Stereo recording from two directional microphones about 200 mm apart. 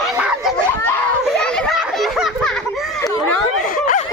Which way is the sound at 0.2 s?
5° right (ahead or behind).